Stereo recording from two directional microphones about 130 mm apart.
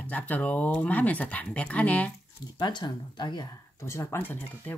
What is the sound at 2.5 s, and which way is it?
Speech, 35° left (ahead or behind).